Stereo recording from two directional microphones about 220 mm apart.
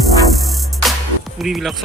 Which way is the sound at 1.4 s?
Centre (ahead or behind).